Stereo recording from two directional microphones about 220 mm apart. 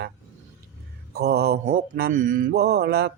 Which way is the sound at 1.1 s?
45° right (ahead or behind).